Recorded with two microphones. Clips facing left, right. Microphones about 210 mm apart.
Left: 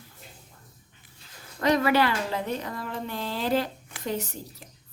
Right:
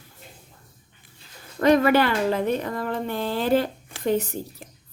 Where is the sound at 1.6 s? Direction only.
55° right (ahead or behind).